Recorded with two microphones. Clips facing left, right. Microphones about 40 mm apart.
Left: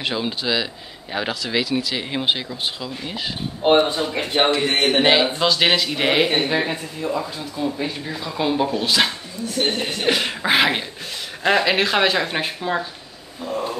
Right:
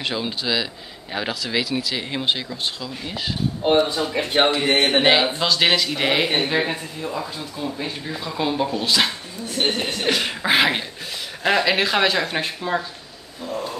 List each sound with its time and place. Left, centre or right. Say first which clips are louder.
0.0 s speech: left 1 dB; centre
3.6 s speech: left 2 dB; left
4.4 s speech: even; centre
13.5 s a sound: left 3 dB; left